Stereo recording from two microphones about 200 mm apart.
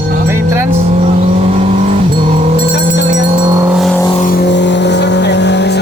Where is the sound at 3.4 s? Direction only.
20° right (ahead or behind).